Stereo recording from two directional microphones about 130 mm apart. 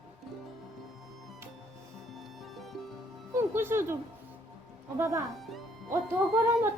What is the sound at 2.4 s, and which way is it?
Music, centre (ahead or behind).